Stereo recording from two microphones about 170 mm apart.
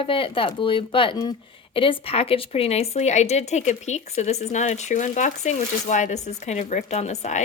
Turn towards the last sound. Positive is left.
turn(degrees=40)  # may be behind; listen again after turning